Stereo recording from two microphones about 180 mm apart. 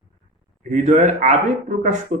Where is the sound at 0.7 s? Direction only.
40° right (ahead or behind).